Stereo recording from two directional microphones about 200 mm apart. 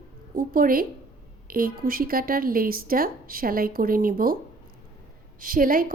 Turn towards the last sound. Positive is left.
turn(degrees=-45)  # may be behind; listen again after turning